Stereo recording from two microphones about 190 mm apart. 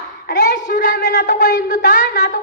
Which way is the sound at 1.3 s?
45° left (ahead or behind).